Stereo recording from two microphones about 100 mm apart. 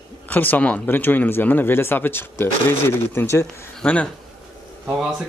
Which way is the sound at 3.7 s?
10° left (ahead or behind).